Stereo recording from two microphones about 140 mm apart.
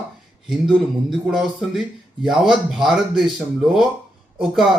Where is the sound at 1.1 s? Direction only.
Centre (ahead or behind).